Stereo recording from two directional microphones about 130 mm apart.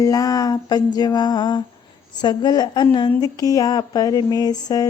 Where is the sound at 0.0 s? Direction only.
30° left (ahead or behind).